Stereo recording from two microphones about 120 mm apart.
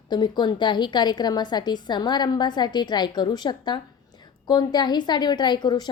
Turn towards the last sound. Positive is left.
turn(degrees=35)  # may be behind; listen again after turning